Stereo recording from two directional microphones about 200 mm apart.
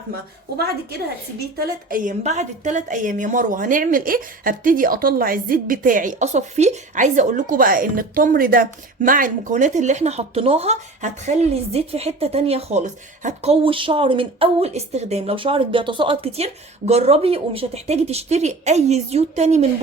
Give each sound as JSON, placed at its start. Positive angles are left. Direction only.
{"t": 0.5, "sound": "a woman's voice", "side_deg": -50}